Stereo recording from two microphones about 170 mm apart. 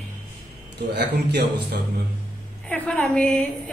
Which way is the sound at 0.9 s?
70° right (ahead or behind).